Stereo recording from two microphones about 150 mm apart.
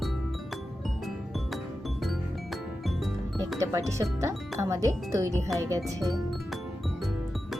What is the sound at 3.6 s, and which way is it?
Speech, 20° right (ahead or behind).